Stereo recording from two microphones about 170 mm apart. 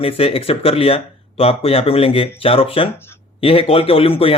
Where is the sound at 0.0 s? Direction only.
35° left (ahead or behind).